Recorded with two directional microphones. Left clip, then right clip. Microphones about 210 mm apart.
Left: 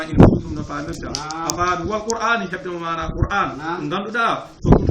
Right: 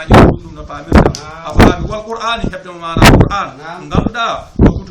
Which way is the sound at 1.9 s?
70° right (ahead or behind).